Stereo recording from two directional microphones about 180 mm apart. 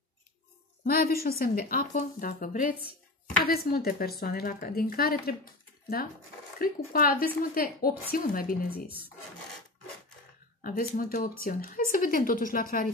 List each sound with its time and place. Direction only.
0.8 s speech: 55° left (ahead or behind)
10.6 s speech: 50° left (ahead or behind)